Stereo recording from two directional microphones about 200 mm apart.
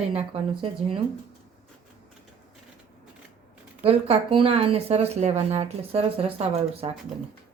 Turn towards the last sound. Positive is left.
turn(degrees=-30)  # may be behind; listen again after turning